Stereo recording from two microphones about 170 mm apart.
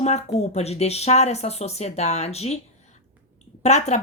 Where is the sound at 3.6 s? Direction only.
40° left (ahead or behind).